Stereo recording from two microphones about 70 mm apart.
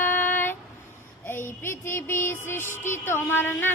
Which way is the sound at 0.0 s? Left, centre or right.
Left.